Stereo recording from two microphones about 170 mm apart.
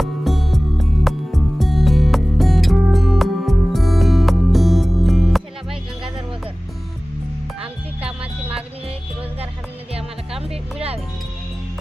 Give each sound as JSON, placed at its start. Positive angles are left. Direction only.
{"t": 0.0, "sound": "music", "side_deg": 0}
{"t": 7.6, "sound": "music", "side_deg": -35}
{"t": 9.9, "sound": "music", "side_deg": -35}